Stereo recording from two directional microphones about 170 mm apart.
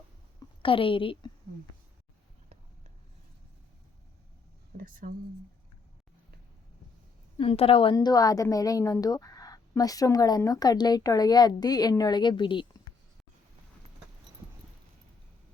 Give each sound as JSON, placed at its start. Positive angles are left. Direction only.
{"t": 0.6, "sound": "a woman's voice", "side_deg": 30}
{"t": 4.8, "sound": "speech", "side_deg": -55}
{"t": 7.3, "sound": "a woman's voice", "side_deg": 35}
{"t": 7.9, "sound": "a woman's voice", "side_deg": 20}